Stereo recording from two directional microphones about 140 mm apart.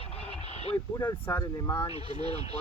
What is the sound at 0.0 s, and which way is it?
Vehicle, 45° left (ahead or behind).